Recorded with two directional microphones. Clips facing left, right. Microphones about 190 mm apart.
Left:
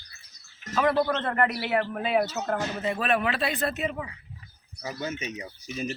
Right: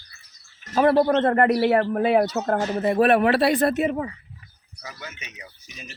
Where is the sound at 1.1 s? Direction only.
50° right (ahead or behind).